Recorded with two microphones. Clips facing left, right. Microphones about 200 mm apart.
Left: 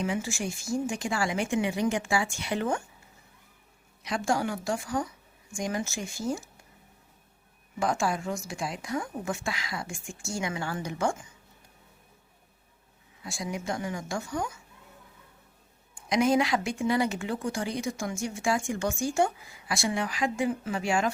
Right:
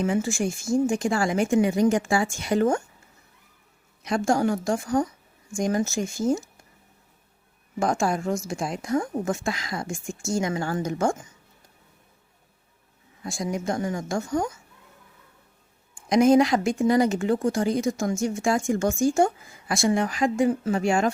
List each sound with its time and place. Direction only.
0.0 s speech: 45° right (ahead or behind)
4.0 s speech: 45° right (ahead or behind)
7.8 s speech: 45° right (ahead or behind)
13.2 s speech: 45° right (ahead or behind)
16.0 s speech: 45° right (ahead or behind)